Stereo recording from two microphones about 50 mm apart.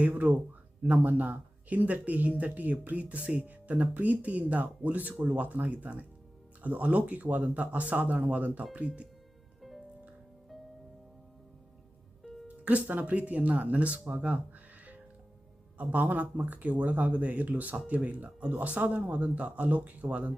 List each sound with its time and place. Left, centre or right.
0.8 s speech: right
9.6 s music: centre
12.5 s speech: right
15.8 s speech: right